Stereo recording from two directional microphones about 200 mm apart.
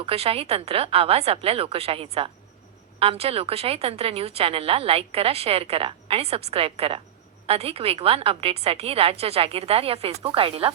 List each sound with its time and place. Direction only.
0.0 s speech: 30° right (ahead or behind)